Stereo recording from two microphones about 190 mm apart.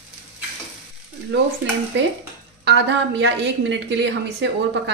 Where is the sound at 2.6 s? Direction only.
65° right (ahead or behind).